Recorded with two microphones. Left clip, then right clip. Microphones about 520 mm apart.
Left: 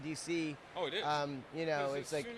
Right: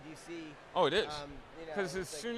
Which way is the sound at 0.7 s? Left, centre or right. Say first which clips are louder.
Right 10 dB; right.